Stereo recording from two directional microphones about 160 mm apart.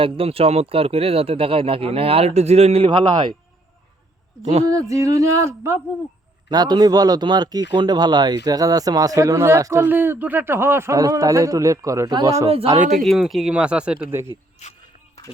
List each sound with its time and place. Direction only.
0.0 s speech: 35° right (ahead or behind)
4.6 s a man's voice: 20° right (ahead or behind)
12.8 s speech: centre (ahead or behind)
14.6 s a sound: 45° left (ahead or behind)